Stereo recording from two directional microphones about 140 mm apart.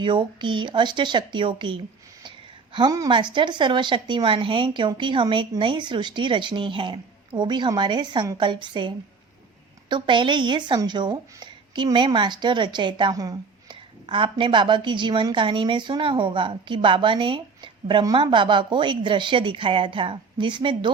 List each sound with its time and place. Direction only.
0.0 s a woman's voice: 35° right (ahead or behind)
9.9 s a woman's voice: 35° right (ahead or behind)